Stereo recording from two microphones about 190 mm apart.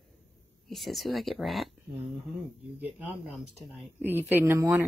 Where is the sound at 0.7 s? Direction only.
Centre (ahead or behind).